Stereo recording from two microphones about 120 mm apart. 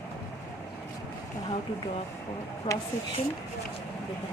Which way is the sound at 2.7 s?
45° left (ahead or behind).